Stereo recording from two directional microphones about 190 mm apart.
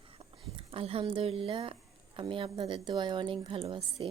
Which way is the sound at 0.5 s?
30° right (ahead or behind).